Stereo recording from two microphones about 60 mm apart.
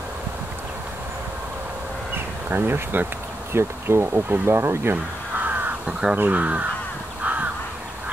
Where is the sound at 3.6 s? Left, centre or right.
Right.